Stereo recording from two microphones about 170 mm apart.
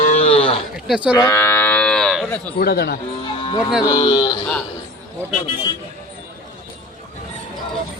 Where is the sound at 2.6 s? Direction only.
65° left (ahead or behind).